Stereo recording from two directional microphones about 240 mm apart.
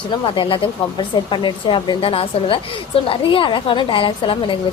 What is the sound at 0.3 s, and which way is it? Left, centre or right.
A woman's voice, left.